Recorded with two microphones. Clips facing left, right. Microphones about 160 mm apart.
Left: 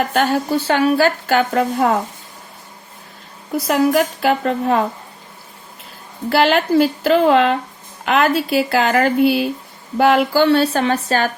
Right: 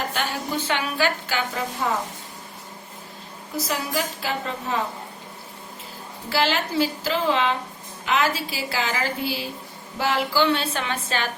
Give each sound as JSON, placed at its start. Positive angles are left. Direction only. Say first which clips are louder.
{"t": 0.1, "sound": "a woman's voice", "louder": "left 10 dB", "side_deg": 45}
{"t": 3.7, "sound": "speech", "louder": "left 13 dB", "side_deg": 60}
{"t": 6.3, "sound": "a woman's voice", "louder": "left 9 dB", "side_deg": 55}